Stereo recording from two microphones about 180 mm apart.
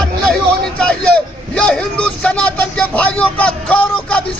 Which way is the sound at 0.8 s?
5° left (ahead or behind).